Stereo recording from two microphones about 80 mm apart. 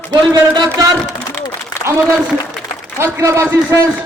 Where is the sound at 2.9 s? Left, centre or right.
Right.